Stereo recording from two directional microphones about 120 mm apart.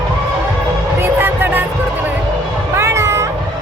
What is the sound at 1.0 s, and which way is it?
Music, 15° right (ahead or behind).